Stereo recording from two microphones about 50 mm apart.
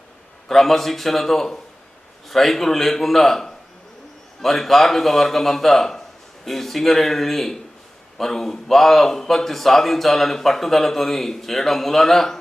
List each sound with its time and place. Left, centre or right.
0.4 s a man's voice: centre